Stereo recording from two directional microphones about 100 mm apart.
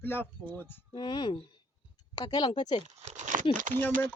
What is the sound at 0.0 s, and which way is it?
Speech, 20° left (ahead or behind).